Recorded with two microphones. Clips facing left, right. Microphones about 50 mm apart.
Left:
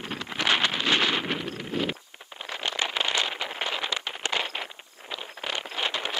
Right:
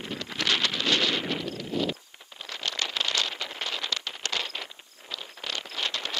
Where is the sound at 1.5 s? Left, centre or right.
Left.